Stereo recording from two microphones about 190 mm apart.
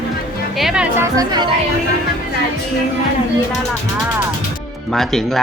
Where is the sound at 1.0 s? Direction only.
20° right (ahead or behind).